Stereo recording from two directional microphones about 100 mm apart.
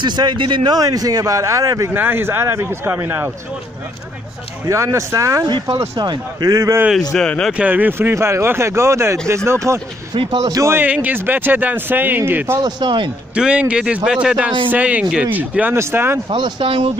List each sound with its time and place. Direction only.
0.0 s a man's voice: 50° right (ahead or behind)
0.7 s speech: 40° right (ahead or behind)
2.0 s speech: 20° right (ahead or behind)
4.6 s speech: 30° right (ahead or behind)
5.9 s speech: 45° right (ahead or behind)
7.1 s speech: 10° left (ahead or behind)
7.5 s speech: 15° right (ahead or behind)
10.1 s a man's voice: 45° right (ahead or behind)
10.6 s speech: 25° right (ahead or behind)
12.5 s a man's voice: 50° right (ahead or behind)
13.3 s a man's voice: 10° right (ahead or behind)
16.3 s speech: 50° right (ahead or behind)